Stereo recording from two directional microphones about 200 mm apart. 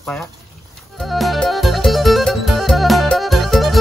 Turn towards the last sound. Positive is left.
turn(degrees=0)  # may be behind; listen again after turning